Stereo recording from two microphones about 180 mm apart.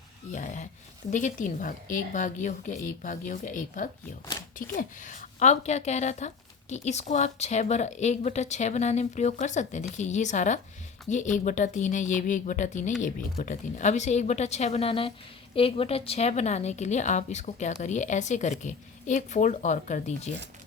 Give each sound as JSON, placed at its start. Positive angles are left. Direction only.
{"t": 0.3, "sound": "a woman's voice", "side_deg": 45}